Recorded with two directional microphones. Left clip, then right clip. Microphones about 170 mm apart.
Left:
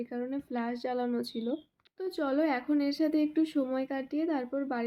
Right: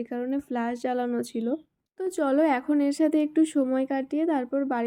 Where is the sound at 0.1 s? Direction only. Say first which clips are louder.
Right 6 dB; 35° right (ahead or behind).